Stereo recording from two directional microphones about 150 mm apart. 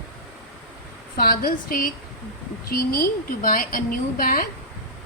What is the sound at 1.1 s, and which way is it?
A woman's voice, 75° left (ahead or behind).